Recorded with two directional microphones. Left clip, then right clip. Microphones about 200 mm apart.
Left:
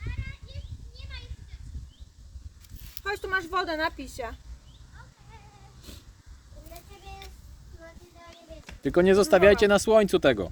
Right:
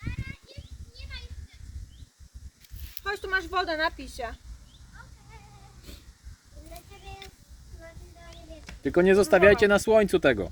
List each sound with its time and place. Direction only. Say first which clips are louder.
2.8 s speech: even; 45° left (ahead or behind)
8.8 s speech: even; 10° left (ahead or behind)